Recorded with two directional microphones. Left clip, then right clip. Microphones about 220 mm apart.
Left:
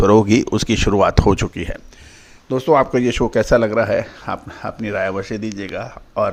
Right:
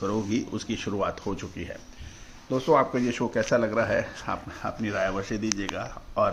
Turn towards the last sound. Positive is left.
turn(degrees=30)  # may be behind; listen again after turning